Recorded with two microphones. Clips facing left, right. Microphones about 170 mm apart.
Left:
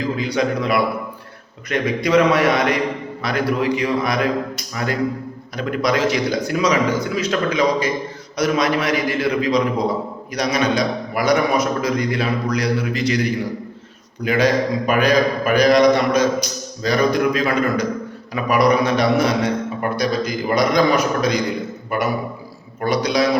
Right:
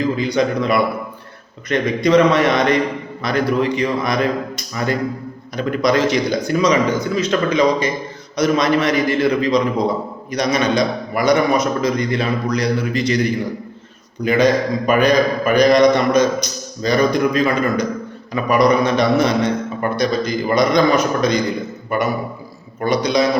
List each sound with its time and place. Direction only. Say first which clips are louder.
0.2 s a man's voice: right 2 dB; 5° left (ahead or behind)
14.3 s a man's voice: right 2 dB; 5° left (ahead or behind)